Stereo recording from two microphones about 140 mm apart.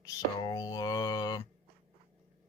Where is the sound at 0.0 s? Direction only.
25° left (ahead or behind).